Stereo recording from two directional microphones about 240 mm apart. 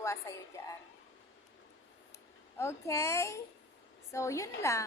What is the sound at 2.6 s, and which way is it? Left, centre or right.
A woman's voice, centre.